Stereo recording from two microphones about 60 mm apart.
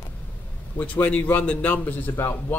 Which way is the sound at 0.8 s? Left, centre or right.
Left.